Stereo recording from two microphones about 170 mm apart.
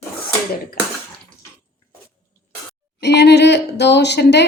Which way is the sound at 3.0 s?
75° left (ahead or behind).